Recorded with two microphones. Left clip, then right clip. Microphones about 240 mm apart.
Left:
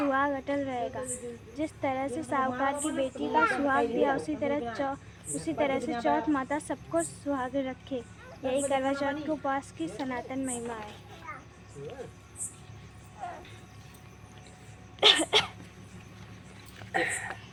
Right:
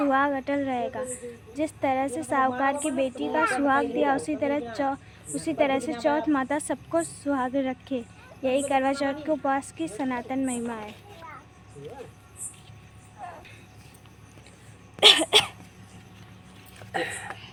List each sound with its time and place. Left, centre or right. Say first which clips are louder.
0.0 s a woman's voice: right 4 dB; right
13.2 s vehicle: left 1 dB; centre
15.0 s cough: right 5 dB; right
16.9 s a sound: left 1 dB; right